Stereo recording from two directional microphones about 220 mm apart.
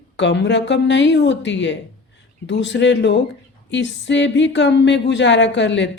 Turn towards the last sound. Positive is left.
turn(degrees=55)  # may be behind; listen again after turning